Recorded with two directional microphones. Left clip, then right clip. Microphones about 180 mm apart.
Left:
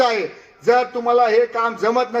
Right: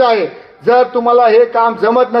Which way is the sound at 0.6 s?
35° left (ahead or behind).